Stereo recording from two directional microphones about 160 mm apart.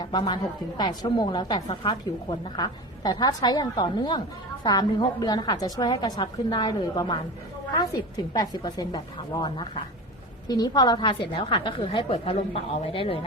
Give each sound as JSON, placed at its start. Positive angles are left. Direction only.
{"t": 0.0, "sound": "a woman's voice", "side_deg": 25}